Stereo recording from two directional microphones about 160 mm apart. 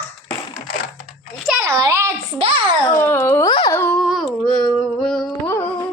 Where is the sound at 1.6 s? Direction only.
20° right (ahead or behind).